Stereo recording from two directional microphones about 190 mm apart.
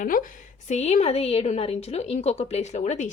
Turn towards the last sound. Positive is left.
turn(degrees=40)  # may be behind; listen again after turning